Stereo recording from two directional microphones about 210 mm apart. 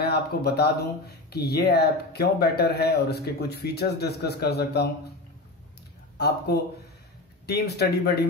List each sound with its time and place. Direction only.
0.0 s speech: 50° left (ahead or behind)
6.1 s speech: 50° left (ahead or behind)